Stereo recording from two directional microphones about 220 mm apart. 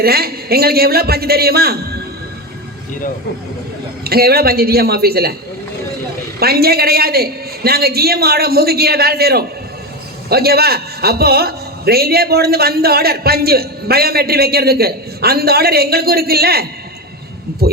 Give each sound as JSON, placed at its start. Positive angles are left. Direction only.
{"t": 0.0, "sound": "a man's voice", "side_deg": -45}
{"t": 4.0, "sound": "a man's voice", "side_deg": -45}
{"t": 6.4, "sound": "a man's voice", "side_deg": -45}